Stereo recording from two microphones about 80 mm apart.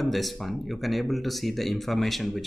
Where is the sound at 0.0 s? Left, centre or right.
Centre.